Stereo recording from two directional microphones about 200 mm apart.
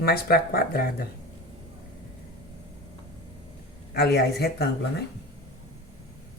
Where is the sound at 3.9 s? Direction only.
55° left (ahead or behind).